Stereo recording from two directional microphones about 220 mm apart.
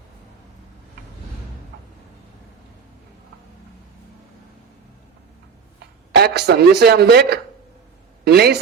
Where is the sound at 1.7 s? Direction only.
50° right (ahead or behind).